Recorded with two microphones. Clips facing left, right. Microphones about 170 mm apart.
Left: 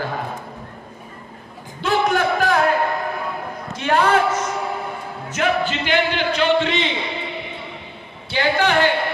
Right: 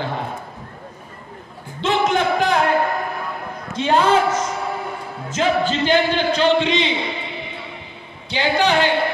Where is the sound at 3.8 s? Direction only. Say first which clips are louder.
Right 1 dB; 25° right (ahead or behind).